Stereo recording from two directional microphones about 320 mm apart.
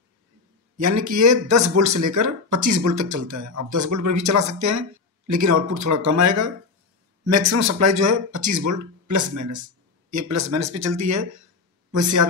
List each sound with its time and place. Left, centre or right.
0.7 s speech: right